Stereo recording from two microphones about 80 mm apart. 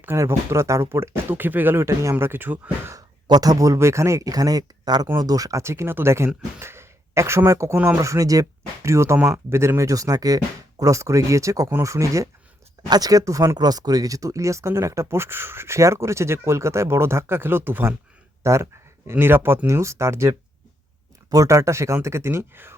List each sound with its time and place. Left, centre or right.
0.2 s speech: right
3.2 s speech: right
13.6 s speech: right